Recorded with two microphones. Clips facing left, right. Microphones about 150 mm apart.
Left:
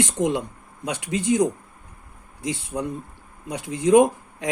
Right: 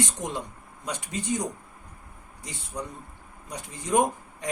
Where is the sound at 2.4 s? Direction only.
90° left.